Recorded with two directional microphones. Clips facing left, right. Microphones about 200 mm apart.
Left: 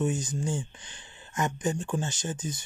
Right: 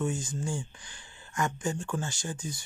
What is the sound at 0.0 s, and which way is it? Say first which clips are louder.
Speech: left 3 dB; 20° left (ahead or behind).